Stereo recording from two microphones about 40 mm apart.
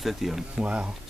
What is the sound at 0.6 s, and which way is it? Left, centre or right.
Speech, right.